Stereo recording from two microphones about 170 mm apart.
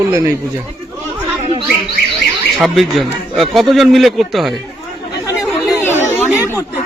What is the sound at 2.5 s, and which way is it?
A man's voice, centre (ahead or behind).